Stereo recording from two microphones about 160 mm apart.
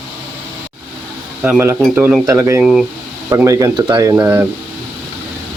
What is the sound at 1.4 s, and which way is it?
Speech, 10° right (ahead or behind).